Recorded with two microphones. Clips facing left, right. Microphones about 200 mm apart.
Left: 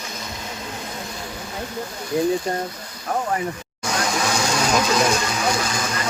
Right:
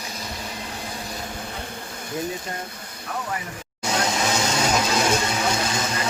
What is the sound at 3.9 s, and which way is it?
Vehicle, 20° right (ahead or behind).